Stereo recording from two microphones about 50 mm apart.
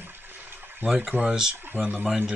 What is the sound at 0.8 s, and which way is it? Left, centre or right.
Speech, centre.